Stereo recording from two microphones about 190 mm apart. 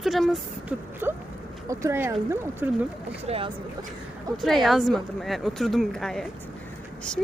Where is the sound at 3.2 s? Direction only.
30° right (ahead or behind).